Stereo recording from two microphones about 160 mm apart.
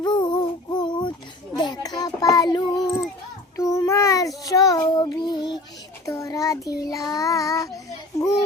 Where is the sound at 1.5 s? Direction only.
25° left (ahead or behind).